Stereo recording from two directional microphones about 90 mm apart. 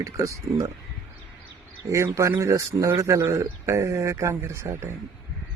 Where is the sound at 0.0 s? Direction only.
35° right (ahead or behind).